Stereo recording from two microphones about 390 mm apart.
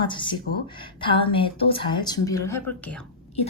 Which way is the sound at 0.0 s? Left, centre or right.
Centre.